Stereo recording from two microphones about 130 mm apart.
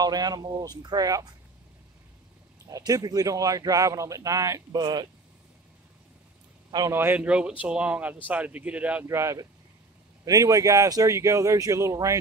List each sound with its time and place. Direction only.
0.0 s speech: 30° right (ahead or behind)
2.6 s a man's voice: 25° right (ahead or behind)
6.9 s speech: 15° right (ahead or behind)
9.0 s a man's voice: 20° right (ahead or behind)